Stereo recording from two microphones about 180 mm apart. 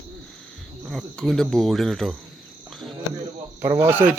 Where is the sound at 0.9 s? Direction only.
Centre (ahead or behind).